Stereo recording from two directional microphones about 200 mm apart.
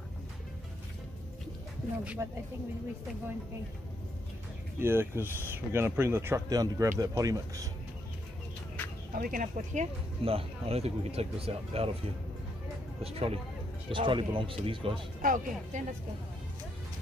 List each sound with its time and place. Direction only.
2.2 s speech: 5° right (ahead or behind)
4.7 s speech: 10° right (ahead or behind)
9.1 s speech: 45° right (ahead or behind)
10.2 s speech: 30° right (ahead or behind)
13.0 s speech: 30° right (ahead or behind)
15.2 s speech: 40° right (ahead or behind)